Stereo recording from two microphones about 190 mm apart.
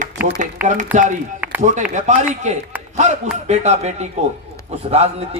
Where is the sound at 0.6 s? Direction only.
10° right (ahead or behind).